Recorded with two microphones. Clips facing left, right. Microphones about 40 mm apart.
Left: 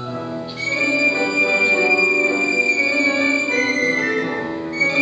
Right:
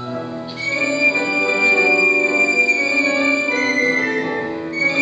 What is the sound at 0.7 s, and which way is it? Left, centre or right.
Music, centre.